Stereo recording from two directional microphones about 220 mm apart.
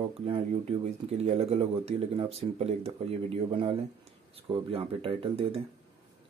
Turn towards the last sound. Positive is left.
turn(degrees=-25)  # may be behind; listen again after turning